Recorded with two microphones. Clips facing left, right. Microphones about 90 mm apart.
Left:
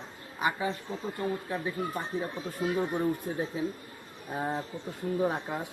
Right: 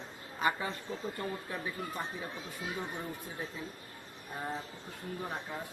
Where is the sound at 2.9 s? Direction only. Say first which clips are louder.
Left 11 dB; 65° left (ahead or behind).